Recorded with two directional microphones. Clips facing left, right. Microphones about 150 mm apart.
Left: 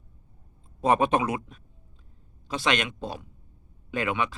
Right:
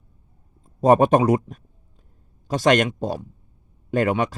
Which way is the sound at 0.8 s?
45° right (ahead or behind).